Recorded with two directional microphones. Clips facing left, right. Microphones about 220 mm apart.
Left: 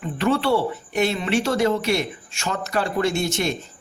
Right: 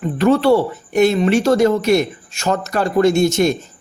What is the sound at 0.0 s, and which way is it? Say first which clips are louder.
Speech: right 7 dB; 40° right (ahead or behind).